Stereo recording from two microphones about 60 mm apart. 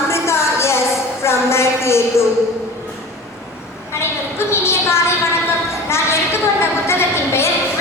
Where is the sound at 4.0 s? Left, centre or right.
Left.